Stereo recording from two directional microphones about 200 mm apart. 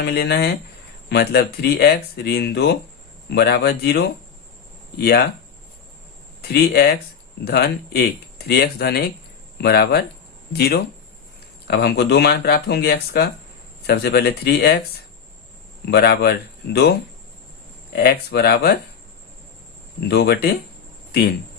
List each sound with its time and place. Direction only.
0.0 s speech: 55° left (ahead or behind)
6.5 s speech: 50° left (ahead or behind)
15.9 s speech: 55° left (ahead or behind)
17.9 s speech: 50° left (ahead or behind)
20.1 s speech: 55° left (ahead or behind)